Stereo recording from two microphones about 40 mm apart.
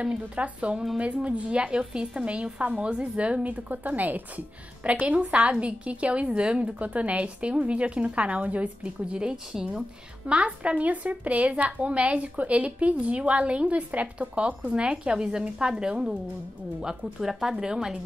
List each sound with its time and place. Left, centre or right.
0.4 s a woman's voice: right
3.4 s speech: right
4.8 s a woman's voice: right
9.1 s a woman's voice: right
10.2 s a woman's voice: right
17.2 s speech: centre